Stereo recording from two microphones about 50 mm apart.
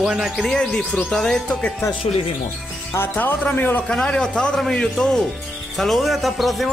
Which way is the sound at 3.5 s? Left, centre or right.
Left.